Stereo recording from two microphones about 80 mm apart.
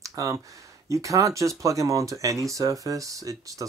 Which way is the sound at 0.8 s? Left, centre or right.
Right.